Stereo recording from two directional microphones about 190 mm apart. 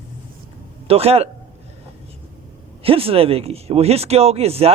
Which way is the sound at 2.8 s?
30° right (ahead or behind).